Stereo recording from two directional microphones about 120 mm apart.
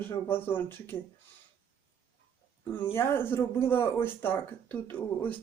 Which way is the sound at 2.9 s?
20° left (ahead or behind).